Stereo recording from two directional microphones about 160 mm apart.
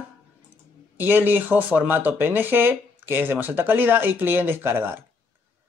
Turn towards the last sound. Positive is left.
turn(degrees=-15)  # may be behind; listen again after turning